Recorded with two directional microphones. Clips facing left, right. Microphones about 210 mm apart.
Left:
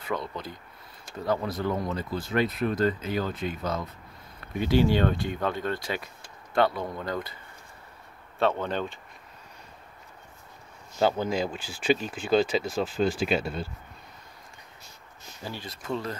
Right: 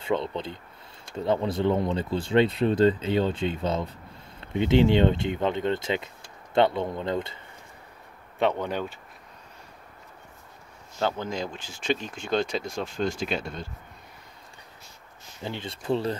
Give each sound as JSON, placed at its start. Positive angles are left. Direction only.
{"t": 0.0, "sound": "speech", "side_deg": -25}
{"t": 8.4, "sound": "speech", "side_deg": -15}
{"t": 11.0, "sound": "speech", "side_deg": 10}
{"t": 15.4, "sound": "speech", "side_deg": -25}